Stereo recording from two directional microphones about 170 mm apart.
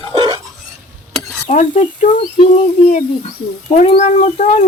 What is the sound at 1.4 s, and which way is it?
Child singing, 40° left (ahead or behind).